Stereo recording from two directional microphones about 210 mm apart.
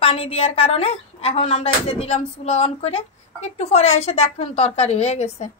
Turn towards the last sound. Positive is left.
turn(degrees=30)  # may be behind; listen again after turning